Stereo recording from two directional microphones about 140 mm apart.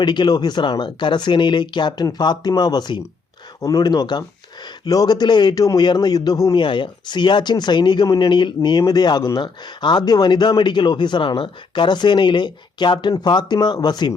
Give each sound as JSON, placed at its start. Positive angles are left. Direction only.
{"t": 0.0, "sound": "speech", "side_deg": 35}